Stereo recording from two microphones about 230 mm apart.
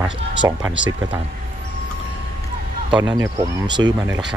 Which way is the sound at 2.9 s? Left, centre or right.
Centre.